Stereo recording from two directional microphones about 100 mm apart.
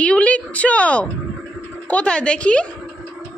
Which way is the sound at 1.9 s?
10° left (ahead or behind).